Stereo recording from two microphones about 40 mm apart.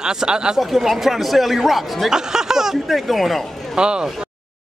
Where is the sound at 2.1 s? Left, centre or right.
Centre.